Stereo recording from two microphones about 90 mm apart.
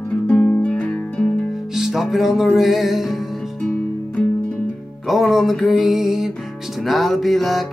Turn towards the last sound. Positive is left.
turn(degrees=0)  # may be behind; listen again after turning